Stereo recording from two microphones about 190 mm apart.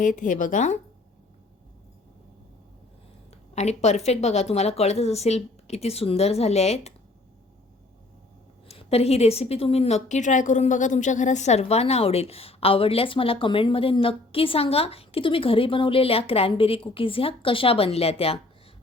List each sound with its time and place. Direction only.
0.0 s speech: 45° left (ahead or behind)
3.5 s a woman's voice: 35° left (ahead or behind)
8.6 s a woman's voice: 30° left (ahead or behind)